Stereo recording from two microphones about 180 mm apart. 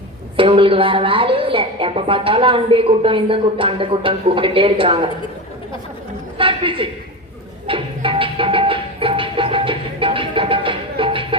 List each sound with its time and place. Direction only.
0.3 s a woman's voice: 30° right (ahead or behind)
6.3 s a sound: 30° right (ahead or behind)
7.7 s music: 30° right (ahead or behind)